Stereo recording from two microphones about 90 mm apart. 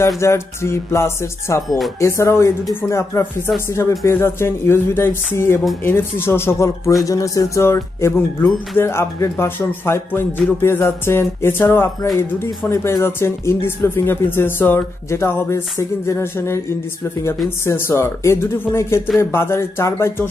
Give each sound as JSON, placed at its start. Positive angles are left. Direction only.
{"t": 0.2, "sound": "music", "side_deg": 30}
{"t": 2.9, "sound": "speech", "side_deg": 30}
{"t": 17.6, "sound": "speech", "side_deg": 30}